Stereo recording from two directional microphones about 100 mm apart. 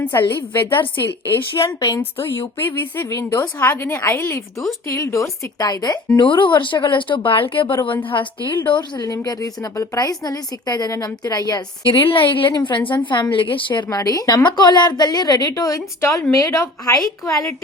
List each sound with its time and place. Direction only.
0.0 s a woman's voice: 20° left (ahead or behind); by 6.2 s 40° left (ahead or behind)
6.2 s a woman's voice: 55° left (ahead or behind)
11.9 s a woman's voice: 60° left (ahead or behind); by 17.0 s 35° left (ahead or behind)